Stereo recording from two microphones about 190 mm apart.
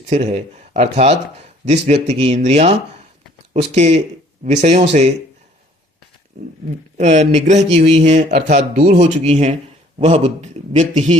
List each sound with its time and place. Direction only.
0.1 s a man's voice: 35° right (ahead or behind)
6.9 s a man's voice: 40° right (ahead or behind)